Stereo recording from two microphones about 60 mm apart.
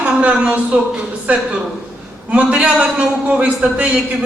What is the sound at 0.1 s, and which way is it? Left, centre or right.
A man's voice, centre.